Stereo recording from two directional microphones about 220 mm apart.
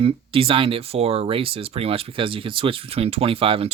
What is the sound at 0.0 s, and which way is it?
Speech, 25° right (ahead or behind).